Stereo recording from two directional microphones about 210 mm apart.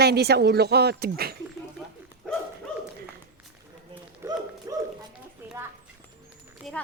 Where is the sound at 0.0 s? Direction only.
50° right (ahead or behind).